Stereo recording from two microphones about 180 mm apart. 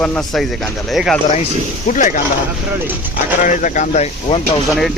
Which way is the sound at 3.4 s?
45° left (ahead or behind).